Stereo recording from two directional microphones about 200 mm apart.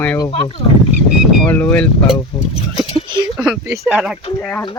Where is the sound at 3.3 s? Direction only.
Centre (ahead or behind).